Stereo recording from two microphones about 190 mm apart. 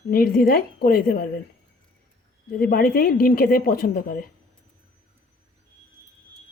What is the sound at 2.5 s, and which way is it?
Speech, 50° left (ahead or behind).